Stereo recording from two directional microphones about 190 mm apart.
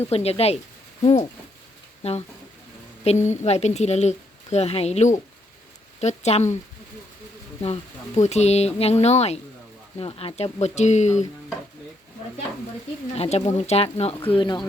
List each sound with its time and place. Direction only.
0.1 s a woman's voice: 35° left (ahead or behind)
7.6 s a woman's voice: 35° left (ahead or behind)
13.1 s a woman's voice: 35° left (ahead or behind)